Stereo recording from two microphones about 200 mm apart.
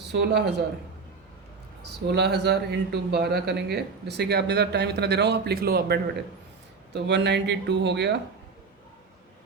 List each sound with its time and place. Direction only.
0.1 s a man's voice: 60° right (ahead or behind)
1.8 s a man's voice: 55° right (ahead or behind)